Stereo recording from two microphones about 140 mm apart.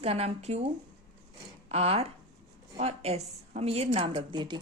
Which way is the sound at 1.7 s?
45° right (ahead or behind).